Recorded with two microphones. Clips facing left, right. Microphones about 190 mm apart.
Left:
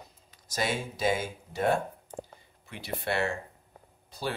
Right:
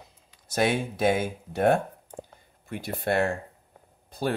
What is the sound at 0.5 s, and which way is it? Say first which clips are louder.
Speech: right 6 dB; 60° right (ahead or behind).